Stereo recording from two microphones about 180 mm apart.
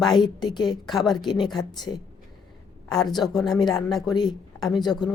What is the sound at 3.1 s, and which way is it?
Speech, centre (ahead or behind).